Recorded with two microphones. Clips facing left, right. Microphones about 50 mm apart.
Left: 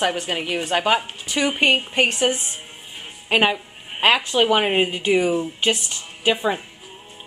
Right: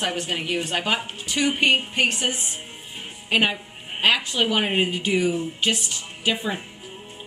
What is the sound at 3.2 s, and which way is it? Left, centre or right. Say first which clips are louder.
A woman's voice: left 3 dB; left.